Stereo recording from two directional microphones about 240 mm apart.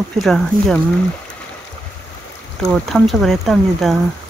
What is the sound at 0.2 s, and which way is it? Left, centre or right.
Speech, centre.